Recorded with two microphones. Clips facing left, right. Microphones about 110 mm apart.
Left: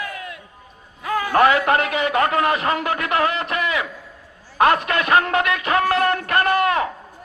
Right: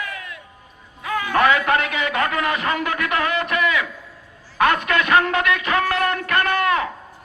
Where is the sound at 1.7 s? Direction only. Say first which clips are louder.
Left 2 dB; 35° left (ahead or behind).